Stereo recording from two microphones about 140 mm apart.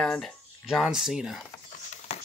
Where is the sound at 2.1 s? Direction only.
50° left (ahead or behind).